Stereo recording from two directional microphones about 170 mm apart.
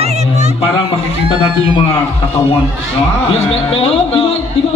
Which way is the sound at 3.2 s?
35° left (ahead or behind).